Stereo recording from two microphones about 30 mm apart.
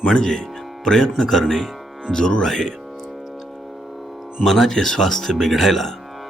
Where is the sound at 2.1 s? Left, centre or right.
Left.